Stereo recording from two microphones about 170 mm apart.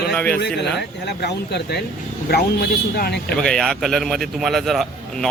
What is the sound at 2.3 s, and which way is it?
Speech, 65° left (ahead or behind).